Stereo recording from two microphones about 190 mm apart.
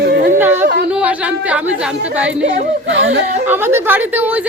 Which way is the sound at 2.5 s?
60° right (ahead or behind).